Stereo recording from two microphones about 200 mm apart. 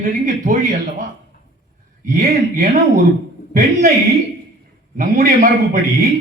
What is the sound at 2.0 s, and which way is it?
Speech, 45° right (ahead or behind).